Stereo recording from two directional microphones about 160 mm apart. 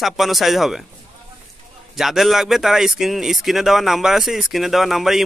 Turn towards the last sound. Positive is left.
turn(degrees=0)  # may be behind; listen again after turning